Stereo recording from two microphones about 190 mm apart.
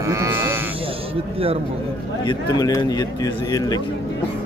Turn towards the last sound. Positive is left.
turn(degrees=20)  # may be behind; listen again after turning